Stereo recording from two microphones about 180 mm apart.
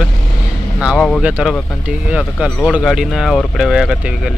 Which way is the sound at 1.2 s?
5° right (ahead or behind).